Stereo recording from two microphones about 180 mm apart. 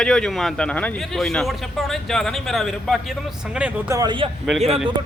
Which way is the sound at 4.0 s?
25° right (ahead or behind).